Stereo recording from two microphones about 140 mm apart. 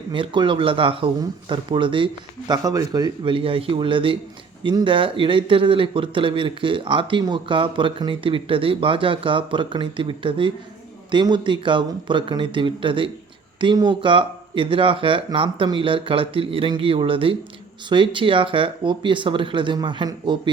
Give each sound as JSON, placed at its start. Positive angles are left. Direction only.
{"t": 0.1, "sound": "speech", "side_deg": -35}
{"t": 2.5, "sound": "speech", "side_deg": -25}